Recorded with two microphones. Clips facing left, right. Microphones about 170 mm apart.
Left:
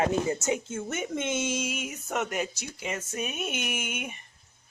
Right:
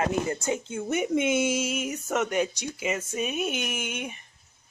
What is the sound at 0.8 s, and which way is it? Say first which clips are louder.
Speech: right 8 dB; 15° right (ahead or behind).